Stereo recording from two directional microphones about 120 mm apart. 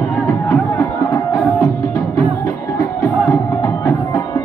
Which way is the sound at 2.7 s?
25° left (ahead or behind).